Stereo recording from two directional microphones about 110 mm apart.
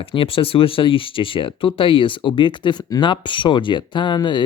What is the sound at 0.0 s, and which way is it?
Speech, 55° left (ahead or behind).